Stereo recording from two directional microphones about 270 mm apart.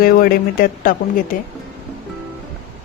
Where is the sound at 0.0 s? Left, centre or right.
Left.